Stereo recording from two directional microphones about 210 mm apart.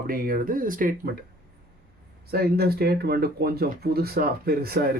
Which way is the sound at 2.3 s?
45° right (ahead or behind).